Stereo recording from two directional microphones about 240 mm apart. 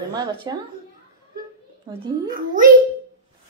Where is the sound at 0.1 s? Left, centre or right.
Centre.